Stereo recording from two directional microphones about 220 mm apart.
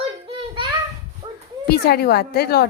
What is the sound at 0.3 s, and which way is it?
Child singing, 25° right (ahead or behind).